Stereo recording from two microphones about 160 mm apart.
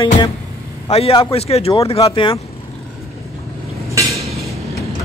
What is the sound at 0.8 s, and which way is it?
Speech, 40° left (ahead or behind).